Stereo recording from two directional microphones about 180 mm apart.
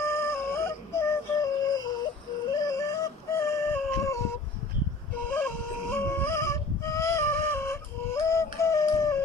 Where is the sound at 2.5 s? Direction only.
20° left (ahead or behind).